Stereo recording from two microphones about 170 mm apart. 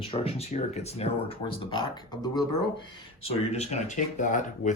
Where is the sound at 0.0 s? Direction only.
35° left (ahead or behind).